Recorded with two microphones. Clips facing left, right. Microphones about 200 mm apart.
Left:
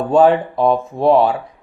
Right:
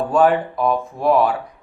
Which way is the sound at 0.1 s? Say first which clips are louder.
Left 5 dB; 25° left (ahead or behind).